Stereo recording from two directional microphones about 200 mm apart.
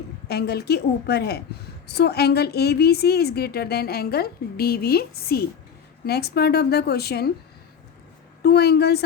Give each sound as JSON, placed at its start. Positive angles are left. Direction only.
{"t": 0.3, "sound": "a woman's voice", "side_deg": 55}
{"t": 8.4, "sound": "a woman's voice", "side_deg": 55}